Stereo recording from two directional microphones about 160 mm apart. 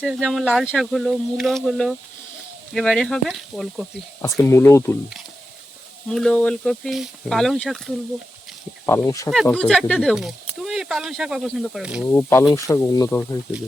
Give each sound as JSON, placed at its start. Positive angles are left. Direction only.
{"t": 0.2, "sound": "speech", "side_deg": 0}
{"t": 4.2, "sound": "speech", "side_deg": 15}
{"t": 6.1, "sound": "speech", "side_deg": 5}
{"t": 8.9, "sound": "speech", "side_deg": 15}
{"t": 9.3, "sound": "speech", "side_deg": 5}
{"t": 12.0, "sound": "speech", "side_deg": 15}